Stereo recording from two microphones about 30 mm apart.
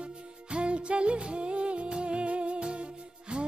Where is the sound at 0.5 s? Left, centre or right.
Right.